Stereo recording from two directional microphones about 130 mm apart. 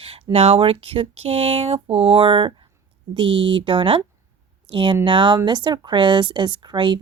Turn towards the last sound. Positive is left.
turn(degrees=-40)  # may be behind; listen again after turning